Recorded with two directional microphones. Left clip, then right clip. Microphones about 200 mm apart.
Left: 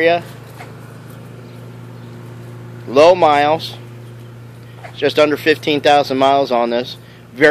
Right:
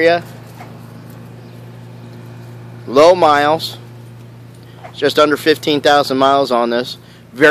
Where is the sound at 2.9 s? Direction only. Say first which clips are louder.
Right 1 dB; 25° right (ahead or behind).